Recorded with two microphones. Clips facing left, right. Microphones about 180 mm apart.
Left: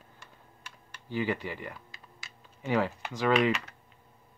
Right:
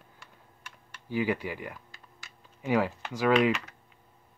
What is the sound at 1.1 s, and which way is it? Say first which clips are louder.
Speech: right 2 dB; 10° right (ahead or behind).